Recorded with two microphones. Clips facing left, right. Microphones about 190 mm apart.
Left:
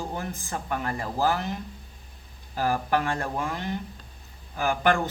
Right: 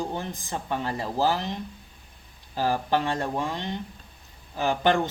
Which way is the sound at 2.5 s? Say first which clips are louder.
Even; 25° right (ahead or behind).